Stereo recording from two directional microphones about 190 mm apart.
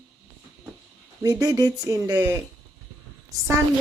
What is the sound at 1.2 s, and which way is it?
Speech, 20° right (ahead or behind).